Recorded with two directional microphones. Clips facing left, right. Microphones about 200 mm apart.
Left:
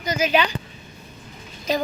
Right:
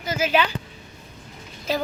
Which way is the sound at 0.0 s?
5° right (ahead or behind).